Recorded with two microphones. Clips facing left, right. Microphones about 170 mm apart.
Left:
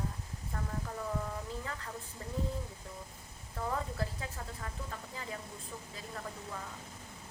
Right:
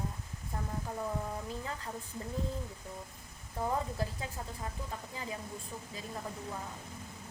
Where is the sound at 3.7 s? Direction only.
20° right (ahead or behind).